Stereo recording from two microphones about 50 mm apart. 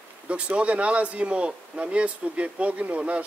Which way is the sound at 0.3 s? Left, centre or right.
Right.